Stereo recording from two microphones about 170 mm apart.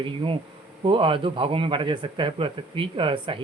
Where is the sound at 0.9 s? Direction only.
30° right (ahead or behind).